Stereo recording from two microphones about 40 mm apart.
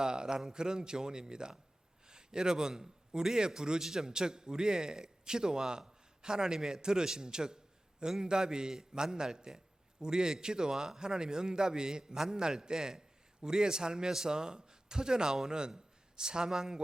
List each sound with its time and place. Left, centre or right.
0.0 s a man's voice: centre